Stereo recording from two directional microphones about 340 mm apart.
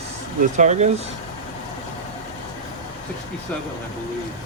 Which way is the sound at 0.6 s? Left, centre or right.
Right.